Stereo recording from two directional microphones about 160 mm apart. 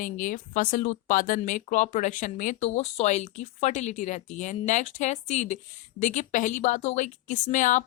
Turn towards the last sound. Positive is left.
turn(degrees=50)  # may be behind; listen again after turning